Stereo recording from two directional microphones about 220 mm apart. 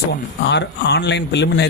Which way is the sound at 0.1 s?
50° left (ahead or behind).